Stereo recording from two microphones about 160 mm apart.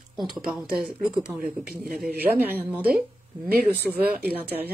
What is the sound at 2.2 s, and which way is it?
Speech, 10° right (ahead or behind).